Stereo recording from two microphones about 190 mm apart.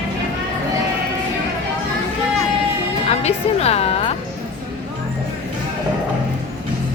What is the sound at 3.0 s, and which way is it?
Music, 35° left (ahead or behind).